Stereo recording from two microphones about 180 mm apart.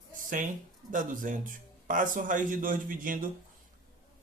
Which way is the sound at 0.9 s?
45° right (ahead or behind).